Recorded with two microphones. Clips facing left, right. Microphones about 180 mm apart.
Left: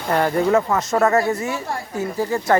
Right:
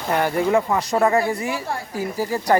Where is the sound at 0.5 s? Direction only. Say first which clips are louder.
Left 1 dB; 15° right (ahead or behind).